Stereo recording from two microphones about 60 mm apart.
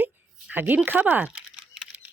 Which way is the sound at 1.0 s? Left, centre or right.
Right.